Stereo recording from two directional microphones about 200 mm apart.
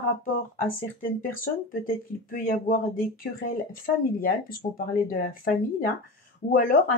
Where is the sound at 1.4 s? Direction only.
45° left (ahead or behind).